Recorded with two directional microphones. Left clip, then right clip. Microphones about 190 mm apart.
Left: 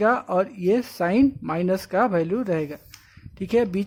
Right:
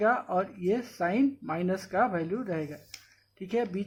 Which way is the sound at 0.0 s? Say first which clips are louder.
Left 6 dB; 45° left (ahead or behind).